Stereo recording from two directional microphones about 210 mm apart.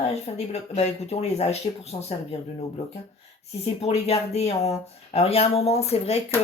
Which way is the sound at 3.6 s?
30° left (ahead or behind).